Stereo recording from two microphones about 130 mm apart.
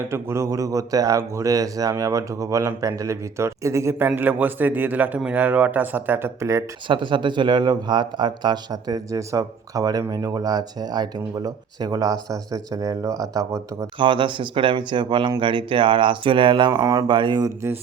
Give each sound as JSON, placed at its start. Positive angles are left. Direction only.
{"t": 0.1, "sound": "a man's voice", "side_deg": -20}
{"t": 6.8, "sound": "a man's voice", "side_deg": -40}
{"t": 14.0, "sound": "speech", "side_deg": -40}
{"t": 16.8, "sound": "a man's voice", "side_deg": -25}
{"t": 17.1, "sound": "speech", "side_deg": -35}